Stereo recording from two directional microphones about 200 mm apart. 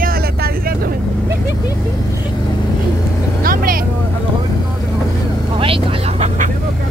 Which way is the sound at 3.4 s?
45° right (ahead or behind).